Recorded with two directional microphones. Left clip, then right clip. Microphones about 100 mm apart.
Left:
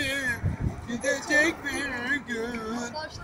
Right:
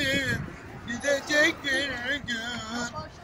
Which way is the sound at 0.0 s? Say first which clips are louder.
Right 1 dB; 25° right (ahead or behind).